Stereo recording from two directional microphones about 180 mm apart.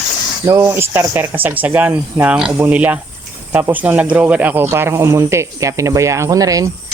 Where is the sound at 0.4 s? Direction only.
15° right (ahead or behind).